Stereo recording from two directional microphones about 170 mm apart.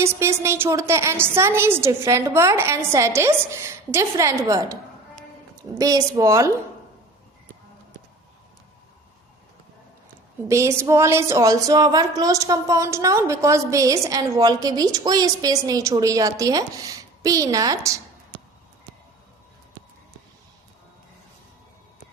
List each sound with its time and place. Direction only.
0.0 s a woman's voice: 15° right (ahead or behind)
10.5 s a woman's voice: 15° right (ahead or behind)